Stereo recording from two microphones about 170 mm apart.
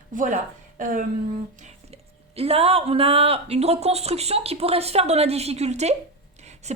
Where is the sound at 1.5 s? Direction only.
40° right (ahead or behind).